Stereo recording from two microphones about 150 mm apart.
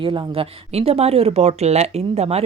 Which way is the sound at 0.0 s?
35° right (ahead or behind).